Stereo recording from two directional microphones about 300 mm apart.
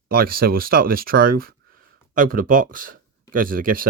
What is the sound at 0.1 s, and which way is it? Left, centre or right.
Speech, right.